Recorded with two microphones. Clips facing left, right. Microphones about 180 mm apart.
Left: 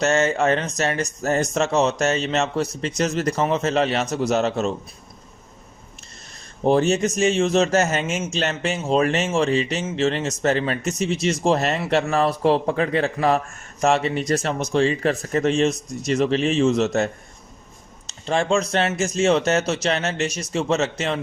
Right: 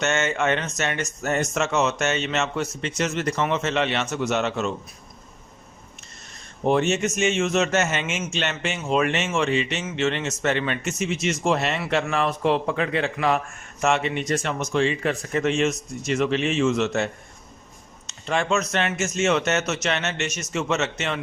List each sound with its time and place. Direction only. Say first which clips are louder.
0.0 s a man's voice: left 4 dB; 35° left (ahead or behind)
6.3 s a man's voice: left 3 dB; 35° left (ahead or behind)